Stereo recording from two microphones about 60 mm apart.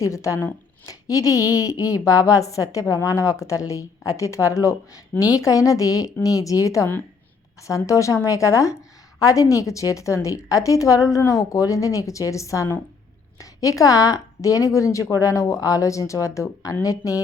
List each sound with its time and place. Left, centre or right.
0.0 s a woman's voice: left
0.9 s a woman's voice: left
16.8 s speech: left